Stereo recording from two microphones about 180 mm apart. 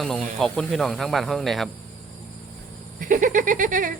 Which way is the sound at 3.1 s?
45° right (ahead or behind).